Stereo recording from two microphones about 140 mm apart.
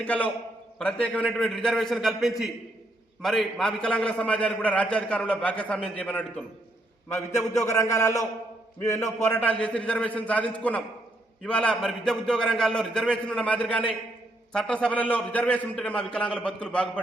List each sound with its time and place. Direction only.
0.0 s a man's voice: 10° left (ahead or behind)
7.3 s a man's voice: 20° left (ahead or behind)